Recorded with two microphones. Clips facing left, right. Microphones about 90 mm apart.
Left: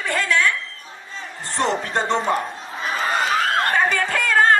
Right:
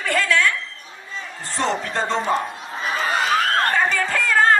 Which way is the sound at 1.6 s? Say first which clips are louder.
Left 1 dB; 35° left (ahead or behind).